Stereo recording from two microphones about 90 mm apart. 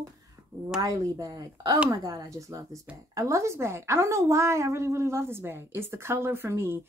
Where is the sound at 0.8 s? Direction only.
45° right (ahead or behind).